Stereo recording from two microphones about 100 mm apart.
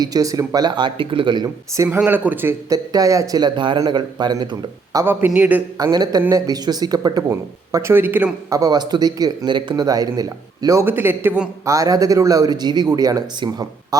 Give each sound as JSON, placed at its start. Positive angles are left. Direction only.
{"t": 0.0, "sound": "speech", "side_deg": -35}
{"t": 1.7, "sound": "speech", "side_deg": -30}
{"t": 2.0, "sound": "speech", "side_deg": -20}
{"t": 2.6, "sound": "speech", "side_deg": -35}
{"t": 5.0, "sound": "a man's voice", "side_deg": -20}
{"t": 5.7, "sound": "speech", "side_deg": -40}
{"t": 7.3, "sound": "speech", "side_deg": -25}
{"t": 8.4, "sound": "speech", "side_deg": -35}
{"t": 10.8, "sound": "speech", "side_deg": -20}
{"t": 11.6, "sound": "speech", "side_deg": -35}